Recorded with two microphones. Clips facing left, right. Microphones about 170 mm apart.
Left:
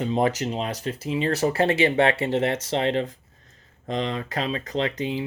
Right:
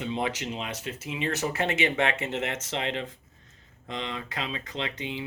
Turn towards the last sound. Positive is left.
turn(degrees=40)  # may be behind; listen again after turning